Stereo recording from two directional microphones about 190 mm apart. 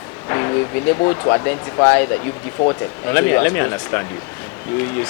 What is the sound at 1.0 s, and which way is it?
Speech, 25° left (ahead or behind).